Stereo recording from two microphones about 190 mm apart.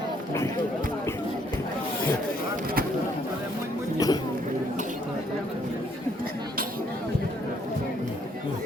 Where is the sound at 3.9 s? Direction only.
20° left (ahead or behind).